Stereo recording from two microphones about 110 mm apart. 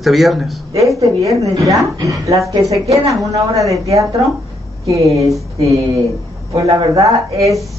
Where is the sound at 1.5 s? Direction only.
30° right (ahead or behind).